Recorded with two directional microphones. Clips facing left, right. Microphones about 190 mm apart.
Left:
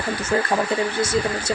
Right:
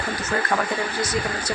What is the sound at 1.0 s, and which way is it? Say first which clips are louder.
Speech: left 4 dB; 25° left (ahead or behind).